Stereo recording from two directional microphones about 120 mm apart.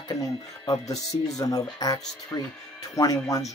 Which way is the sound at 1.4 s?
30° left (ahead or behind).